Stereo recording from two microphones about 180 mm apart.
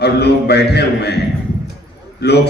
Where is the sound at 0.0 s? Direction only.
65° left (ahead or behind).